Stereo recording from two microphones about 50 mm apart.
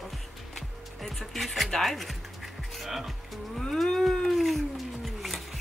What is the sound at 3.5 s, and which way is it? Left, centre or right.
Cat, centre.